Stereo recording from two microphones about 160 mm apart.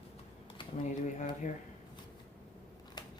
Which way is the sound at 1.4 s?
55° left (ahead or behind).